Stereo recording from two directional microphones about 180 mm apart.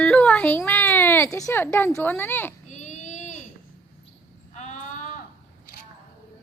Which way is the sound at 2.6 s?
40° left (ahead or behind).